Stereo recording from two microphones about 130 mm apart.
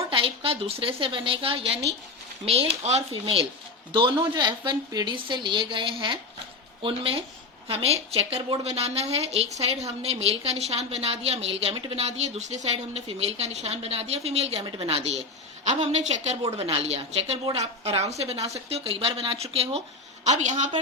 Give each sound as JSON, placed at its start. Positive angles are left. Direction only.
{"t": 0.0, "sound": "a woman's voice", "side_deg": -45}
{"t": 16.5, "sound": "a woman's voice", "side_deg": -50}
{"t": 20.2, "sound": "a woman's voice", "side_deg": -65}